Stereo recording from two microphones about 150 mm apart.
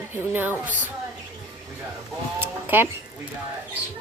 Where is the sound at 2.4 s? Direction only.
15° right (ahead or behind).